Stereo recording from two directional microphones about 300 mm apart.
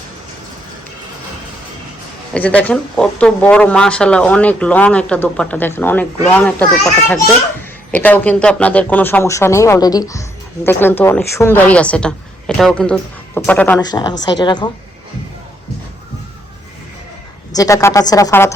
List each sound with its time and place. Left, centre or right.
2.3 s speech: centre
17.5 s speech: centre